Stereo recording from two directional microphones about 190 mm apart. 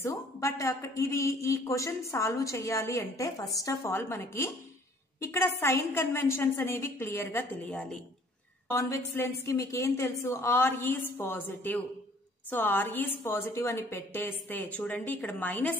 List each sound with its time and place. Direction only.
0.0 s a man's voice: 15° left (ahead or behind)